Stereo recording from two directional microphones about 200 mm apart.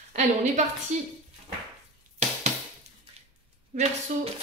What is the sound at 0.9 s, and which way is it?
Speech, 35° right (ahead or behind).